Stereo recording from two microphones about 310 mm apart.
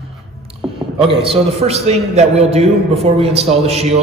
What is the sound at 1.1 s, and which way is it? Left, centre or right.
A man's voice, centre.